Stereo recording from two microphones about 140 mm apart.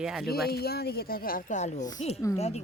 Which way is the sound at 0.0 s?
5° right (ahead or behind).